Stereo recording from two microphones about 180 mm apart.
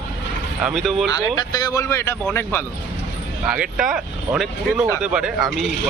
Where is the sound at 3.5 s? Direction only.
5° right (ahead or behind).